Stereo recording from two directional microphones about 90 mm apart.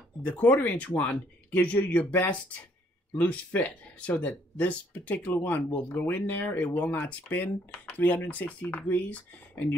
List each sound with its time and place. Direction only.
0.3 s speech: 15° left (ahead or behind)